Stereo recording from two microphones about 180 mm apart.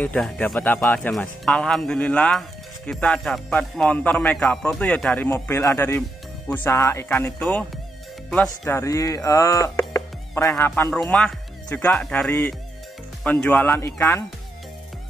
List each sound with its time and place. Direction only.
0.0 s speech: 5° left (ahead or behind)
11.0 s speech: 5° left (ahead or behind)